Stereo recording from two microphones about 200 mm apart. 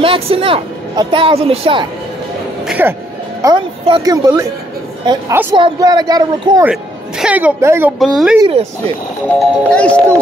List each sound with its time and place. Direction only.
0.0 s speech: 25° right (ahead or behind)
2.6 s music: 5° right (ahead or behind)
3.4 s speech: 25° right (ahead or behind)
6.6 s a woman's voice: 5° right (ahead or behind)
8.0 s speech: centre (ahead or behind)
8.4 s speech: 25° right (ahead or behind)
9.4 s speech: 5° left (ahead or behind)